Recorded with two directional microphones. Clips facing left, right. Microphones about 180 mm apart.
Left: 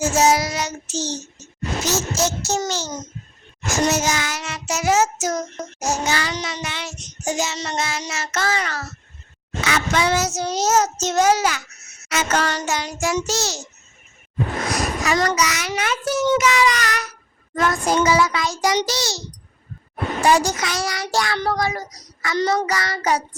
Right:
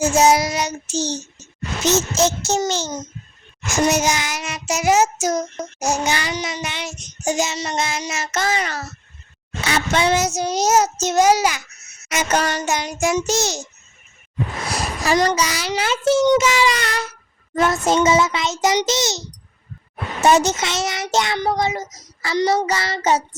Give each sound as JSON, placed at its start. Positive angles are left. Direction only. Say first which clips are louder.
{"t": 0.0, "sound": "child singing", "louder": "right 2 dB", "side_deg": -15}
{"t": 1.8, "sound": "a child's voice", "louder": "right 5 dB", "side_deg": -20}
{"t": 3.7, "sound": "child singing", "louder": "right 2 dB", "side_deg": -15}
{"t": 9.6, "sound": "child singing", "louder": "right 2 dB", "side_deg": -30}
{"t": 14.7, "sound": "a child's voice", "louder": "right 3 dB", "side_deg": -30}
{"t": 20.2, "sound": "a child's voice", "louder": "right 3 dB", "side_deg": -25}